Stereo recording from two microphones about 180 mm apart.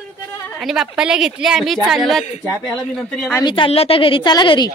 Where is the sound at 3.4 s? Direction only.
30° left (ahead or behind).